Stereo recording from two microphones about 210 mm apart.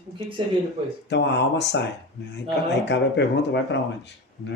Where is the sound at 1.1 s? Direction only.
55° left (ahead or behind).